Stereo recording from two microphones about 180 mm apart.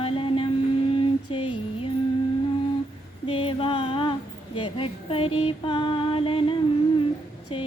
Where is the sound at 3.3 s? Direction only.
30° left (ahead or behind).